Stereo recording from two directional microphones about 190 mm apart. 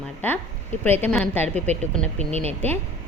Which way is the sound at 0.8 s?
10° left (ahead or behind).